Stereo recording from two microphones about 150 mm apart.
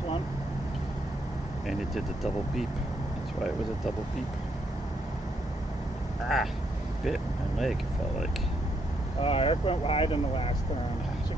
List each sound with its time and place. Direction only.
6.2 s speech: centre (ahead or behind)
9.2 s speech: 40° left (ahead or behind)